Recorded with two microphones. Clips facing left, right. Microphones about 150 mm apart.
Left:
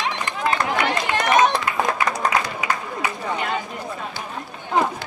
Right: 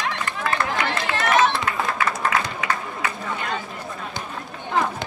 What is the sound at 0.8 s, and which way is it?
Run, 15° left (ahead or behind).